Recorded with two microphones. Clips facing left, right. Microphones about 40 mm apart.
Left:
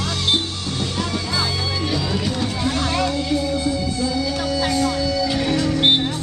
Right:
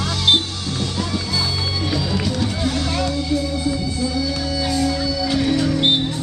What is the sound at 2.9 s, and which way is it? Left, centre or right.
Music, left.